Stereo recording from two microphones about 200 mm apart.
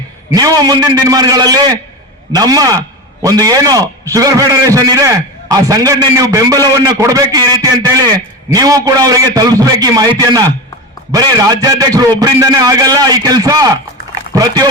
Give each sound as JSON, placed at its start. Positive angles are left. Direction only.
{"t": 0.3, "sound": "a man's voice", "side_deg": -20}